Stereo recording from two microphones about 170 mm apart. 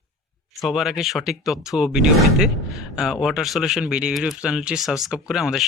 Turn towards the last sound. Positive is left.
turn(degrees=-5)  # may be behind; listen again after turning